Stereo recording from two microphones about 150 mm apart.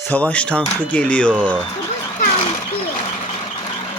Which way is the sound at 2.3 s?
40° left (ahead or behind).